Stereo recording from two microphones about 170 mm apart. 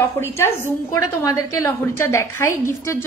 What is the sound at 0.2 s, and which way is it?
A woman's voice, 15° left (ahead or behind).